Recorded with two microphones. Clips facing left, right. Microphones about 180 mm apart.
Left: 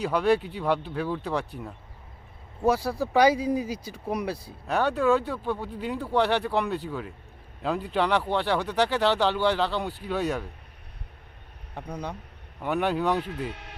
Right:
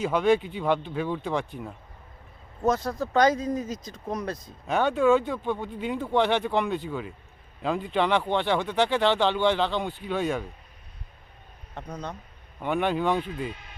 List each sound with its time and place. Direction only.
0.0 s speech: centre (ahead or behind)
2.6 s speech: 10° left (ahead or behind)
11.7 s speech: 10° left (ahead or behind)
13.3 s speech: 70° left (ahead or behind)